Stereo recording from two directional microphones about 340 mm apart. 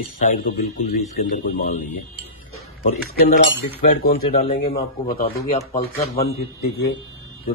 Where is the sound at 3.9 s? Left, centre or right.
Left.